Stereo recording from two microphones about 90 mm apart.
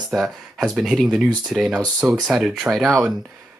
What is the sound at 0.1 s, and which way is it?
Speech, centre (ahead or behind).